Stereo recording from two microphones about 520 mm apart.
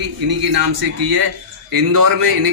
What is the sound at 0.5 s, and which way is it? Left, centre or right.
Speech, right.